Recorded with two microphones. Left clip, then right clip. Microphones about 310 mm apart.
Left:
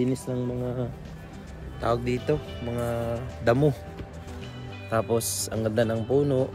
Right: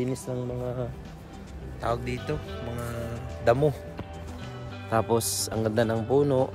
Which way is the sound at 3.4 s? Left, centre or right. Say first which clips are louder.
Even; centre.